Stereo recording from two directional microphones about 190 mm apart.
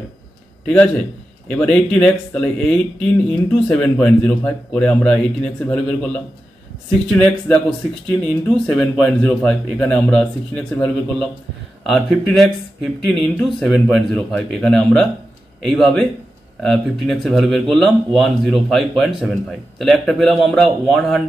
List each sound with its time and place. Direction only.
0.7 s speech: 5° left (ahead or behind)